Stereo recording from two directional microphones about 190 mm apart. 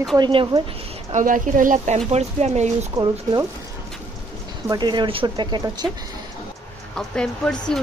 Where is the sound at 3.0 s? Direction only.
15° right (ahead or behind).